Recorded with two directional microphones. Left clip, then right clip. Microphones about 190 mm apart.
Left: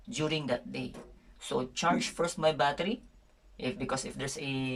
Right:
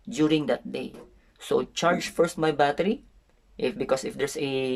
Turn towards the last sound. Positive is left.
turn(degrees=-50)  # may be behind; listen again after turning